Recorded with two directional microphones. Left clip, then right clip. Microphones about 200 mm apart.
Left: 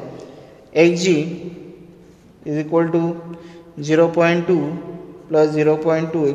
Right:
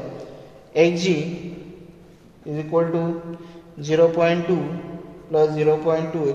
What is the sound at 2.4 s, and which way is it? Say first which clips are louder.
A man's voice: left 3 dB; 50° left (ahead or behind).